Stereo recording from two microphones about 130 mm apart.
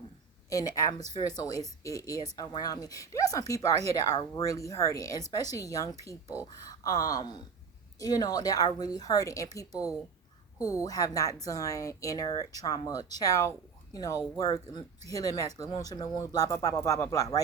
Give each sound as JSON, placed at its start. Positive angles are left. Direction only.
{"t": 0.5, "sound": "speech", "side_deg": 25}